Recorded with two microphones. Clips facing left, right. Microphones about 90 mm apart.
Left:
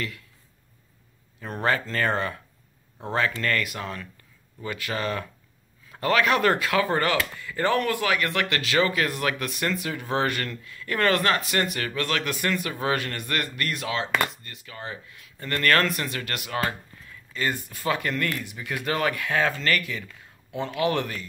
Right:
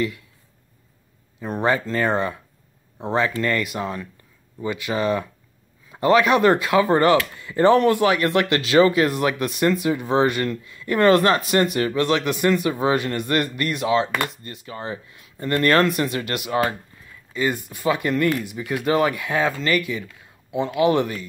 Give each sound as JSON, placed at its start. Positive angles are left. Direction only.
{"t": 1.4, "sound": "speech", "side_deg": -15}